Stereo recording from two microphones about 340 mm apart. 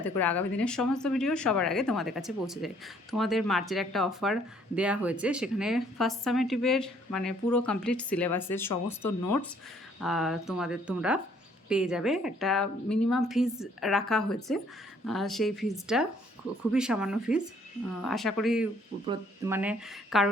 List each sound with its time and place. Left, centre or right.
0.2 s speech: centre
9.0 s speech: left
10.0 s speech: centre